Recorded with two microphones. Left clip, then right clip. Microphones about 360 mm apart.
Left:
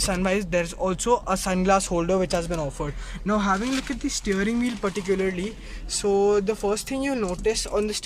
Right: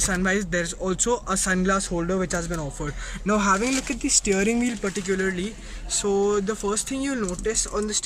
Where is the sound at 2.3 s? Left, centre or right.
Left.